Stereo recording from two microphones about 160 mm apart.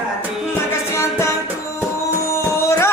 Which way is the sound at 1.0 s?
15° left (ahead or behind).